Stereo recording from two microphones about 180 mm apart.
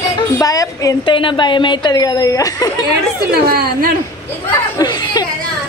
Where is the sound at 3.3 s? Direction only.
55° right (ahead or behind).